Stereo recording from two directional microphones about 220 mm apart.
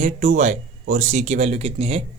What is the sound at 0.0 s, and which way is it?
Speech, 30° right (ahead or behind).